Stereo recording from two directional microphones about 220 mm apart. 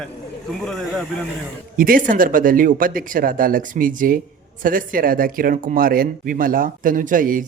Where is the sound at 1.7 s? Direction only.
40° right (ahead or behind).